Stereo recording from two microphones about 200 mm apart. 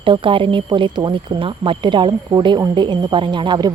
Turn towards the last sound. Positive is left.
turn(degrees=-25)  # may be behind; listen again after turning